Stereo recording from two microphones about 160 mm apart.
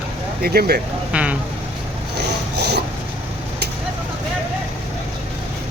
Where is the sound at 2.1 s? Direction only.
90° right.